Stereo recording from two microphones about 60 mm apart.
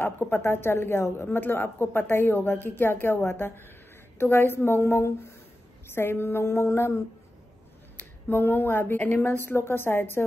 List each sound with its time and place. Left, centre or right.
0.0 s a woman's voice: left
4.2 s a sound: left
8.3 s a woman's voice: left